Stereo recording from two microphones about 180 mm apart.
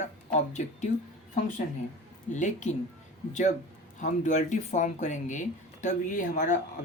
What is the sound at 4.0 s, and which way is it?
Speech, 45° left (ahead or behind).